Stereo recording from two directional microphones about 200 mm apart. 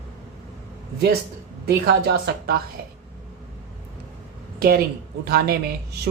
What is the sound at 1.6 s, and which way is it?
Speech, 50° right (ahead or behind).